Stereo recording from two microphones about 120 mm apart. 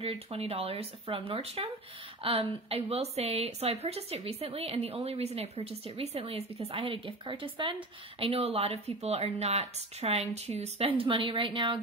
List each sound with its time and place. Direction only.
0.0 s a woman's voice: 55° right (ahead or behind)